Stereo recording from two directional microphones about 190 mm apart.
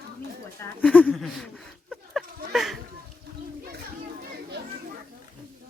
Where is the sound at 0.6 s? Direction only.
5° left (ahead or behind).